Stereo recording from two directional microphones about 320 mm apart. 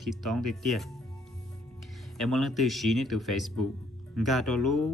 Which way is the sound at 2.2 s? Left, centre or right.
Centre.